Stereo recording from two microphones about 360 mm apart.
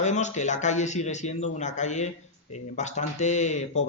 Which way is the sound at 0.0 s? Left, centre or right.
Centre.